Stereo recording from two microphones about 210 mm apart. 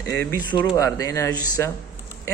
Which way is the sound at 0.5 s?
15° left (ahead or behind).